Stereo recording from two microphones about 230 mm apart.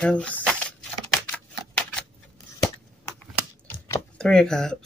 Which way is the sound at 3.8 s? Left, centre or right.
Centre.